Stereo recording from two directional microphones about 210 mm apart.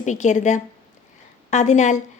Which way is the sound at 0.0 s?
35° left (ahead or behind).